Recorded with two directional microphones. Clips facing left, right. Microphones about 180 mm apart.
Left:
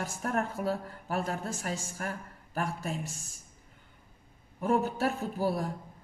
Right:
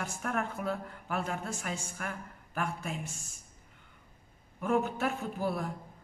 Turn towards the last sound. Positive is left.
turn(degrees=35)  # may be behind; listen again after turning